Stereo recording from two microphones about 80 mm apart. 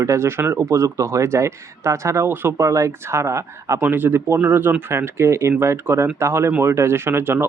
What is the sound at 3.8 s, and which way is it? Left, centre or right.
Speech, right.